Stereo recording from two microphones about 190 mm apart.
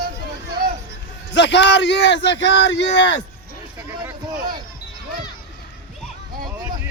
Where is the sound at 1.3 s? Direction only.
70° left (ahead or behind).